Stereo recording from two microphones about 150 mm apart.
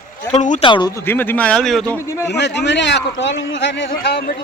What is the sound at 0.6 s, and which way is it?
Speech, 30° left (ahead or behind).